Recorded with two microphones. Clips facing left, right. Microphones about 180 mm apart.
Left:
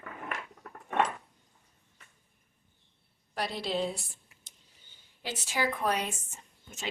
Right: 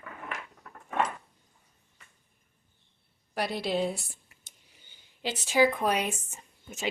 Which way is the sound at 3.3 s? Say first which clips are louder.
Right 3 dB; 5° right (ahead or behind).